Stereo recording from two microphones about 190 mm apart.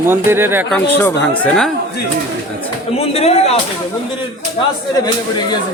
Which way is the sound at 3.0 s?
35° left (ahead or behind).